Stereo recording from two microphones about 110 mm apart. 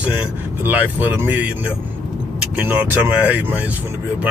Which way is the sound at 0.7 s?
15° right (ahead or behind).